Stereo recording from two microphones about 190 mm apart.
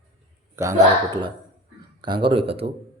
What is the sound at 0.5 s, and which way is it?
A man's voice, 15° right (ahead or behind).